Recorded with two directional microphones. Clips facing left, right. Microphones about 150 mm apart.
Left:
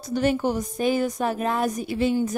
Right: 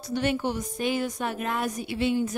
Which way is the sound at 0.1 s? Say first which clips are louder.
Left 4 dB; 40° left (ahead or behind).